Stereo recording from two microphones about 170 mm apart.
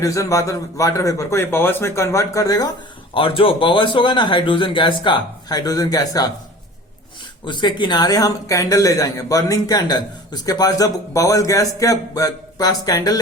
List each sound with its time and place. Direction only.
0.0 s a man's voice: 20° left (ahead or behind)
3.2 s a man's voice: 30° left (ahead or behind)
7.4 s a man's voice: 25° left (ahead or behind)